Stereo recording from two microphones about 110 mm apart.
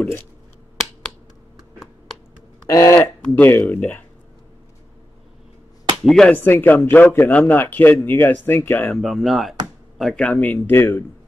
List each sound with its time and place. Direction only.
2.7 s a man's voice: 30° left (ahead or behind)
3.2 s a man's voice: 15° left (ahead or behind)
6.0 s speech: 5° left (ahead or behind)
6.3 s a man's voice: 15° left (ahead or behind)
8.9 s speech: centre (ahead or behind)
10.2 s a man's voice: 15° left (ahead or behind)